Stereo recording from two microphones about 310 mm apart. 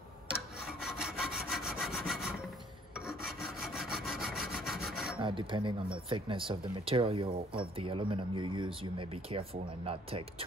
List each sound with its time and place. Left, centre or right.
0.8 s wood: centre
1.5 s sawing: centre
5.2 s speech: centre